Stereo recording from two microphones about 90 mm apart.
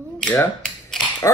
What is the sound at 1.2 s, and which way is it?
Dog, 35° left (ahead or behind).